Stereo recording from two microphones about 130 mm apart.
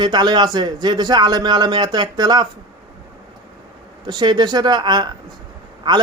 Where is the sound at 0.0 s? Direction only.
35° right (ahead or behind).